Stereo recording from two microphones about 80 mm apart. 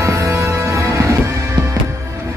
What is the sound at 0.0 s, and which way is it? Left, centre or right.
Music, right.